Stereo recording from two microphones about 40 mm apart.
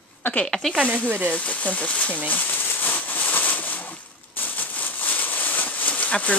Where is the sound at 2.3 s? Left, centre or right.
Left.